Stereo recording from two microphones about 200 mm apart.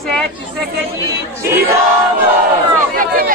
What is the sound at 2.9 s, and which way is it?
Speech, 45° right (ahead or behind).